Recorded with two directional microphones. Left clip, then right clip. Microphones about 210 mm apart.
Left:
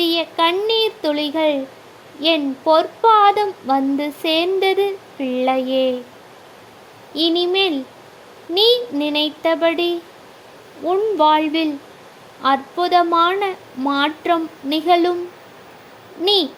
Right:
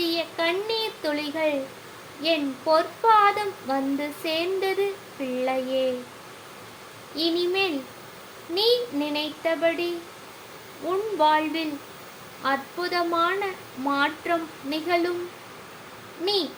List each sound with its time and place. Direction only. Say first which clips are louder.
0.0 s a sound: left 8 dB; 35° left (ahead or behind)
2.2 s speech: left 7 dB; 35° left (ahead or behind)
7.2 s speech: left 7 dB; 35° left (ahead or behind)
10.8 s speech: left 7 dB; 30° left (ahead or behind)
16.2 s speech: left 9 dB; 35° left (ahead or behind)